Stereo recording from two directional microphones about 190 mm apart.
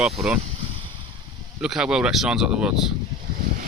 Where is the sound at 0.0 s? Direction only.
5° right (ahead or behind).